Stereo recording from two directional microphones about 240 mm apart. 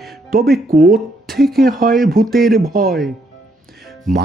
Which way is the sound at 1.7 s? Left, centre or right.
Right.